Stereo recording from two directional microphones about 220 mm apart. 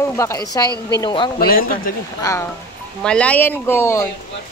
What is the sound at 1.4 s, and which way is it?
Speech, 40° left (ahead or behind).